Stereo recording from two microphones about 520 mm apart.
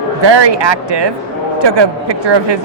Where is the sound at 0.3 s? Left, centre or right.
Right.